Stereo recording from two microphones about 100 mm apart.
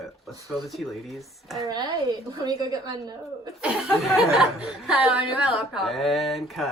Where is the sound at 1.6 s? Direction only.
40° right (ahead or behind).